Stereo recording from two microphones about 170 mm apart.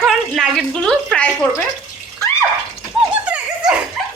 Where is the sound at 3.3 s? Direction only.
5° right (ahead or behind).